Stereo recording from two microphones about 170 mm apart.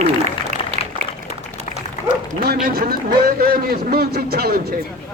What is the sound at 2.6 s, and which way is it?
Speech, 60° right (ahead or behind).